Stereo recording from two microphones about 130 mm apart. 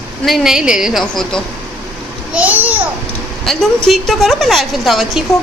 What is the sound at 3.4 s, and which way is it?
A woman's voice, centre (ahead or behind).